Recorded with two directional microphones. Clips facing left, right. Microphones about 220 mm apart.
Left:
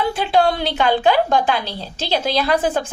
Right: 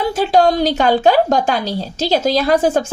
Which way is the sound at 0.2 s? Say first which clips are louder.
Right 6 dB; 40° right (ahead or behind).